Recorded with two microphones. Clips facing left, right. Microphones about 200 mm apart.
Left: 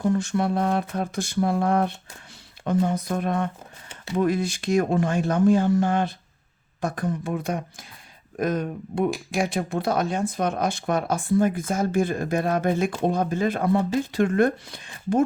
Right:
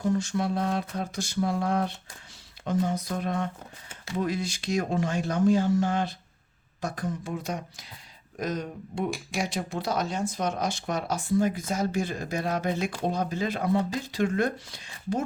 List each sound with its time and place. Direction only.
0.0 s speech: 55° left (ahead or behind)